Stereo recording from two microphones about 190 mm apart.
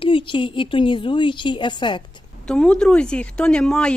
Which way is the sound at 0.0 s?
25° left (ahead or behind).